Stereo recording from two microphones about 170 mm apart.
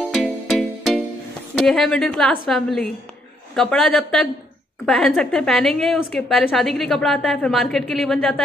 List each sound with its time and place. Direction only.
0.1 s music: centre (ahead or behind)
1.6 s a woman's voice: centre (ahead or behind)